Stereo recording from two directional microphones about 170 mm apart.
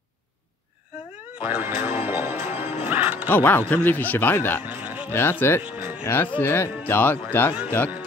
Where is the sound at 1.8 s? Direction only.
35° left (ahead or behind).